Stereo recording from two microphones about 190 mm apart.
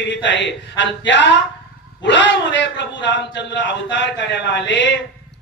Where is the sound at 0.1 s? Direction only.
70° left (ahead or behind).